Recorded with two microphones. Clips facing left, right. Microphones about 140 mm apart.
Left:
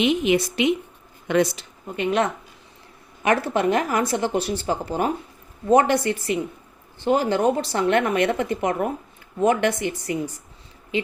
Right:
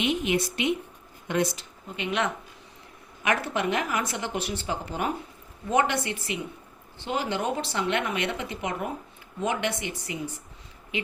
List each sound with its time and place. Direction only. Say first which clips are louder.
0.0 s speech: left 6 dB; 90° left
2.0 s speech: left 6 dB; 40° left (ahead or behind)
10.9 s speech: left 7 dB; 30° left (ahead or behind)